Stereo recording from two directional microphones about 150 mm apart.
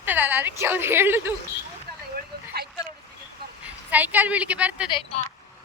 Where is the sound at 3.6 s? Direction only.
10° right (ahead or behind).